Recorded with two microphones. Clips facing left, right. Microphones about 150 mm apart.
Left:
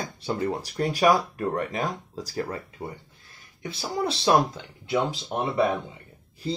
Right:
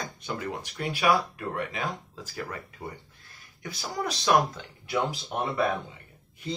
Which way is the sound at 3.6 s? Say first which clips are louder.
Left 4 dB; 30° left (ahead or behind).